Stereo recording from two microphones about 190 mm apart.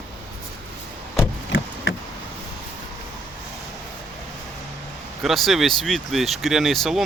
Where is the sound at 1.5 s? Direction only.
70° left (ahead or behind).